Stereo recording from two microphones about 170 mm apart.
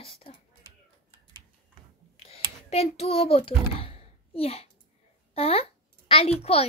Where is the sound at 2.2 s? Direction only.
35° left (ahead or behind).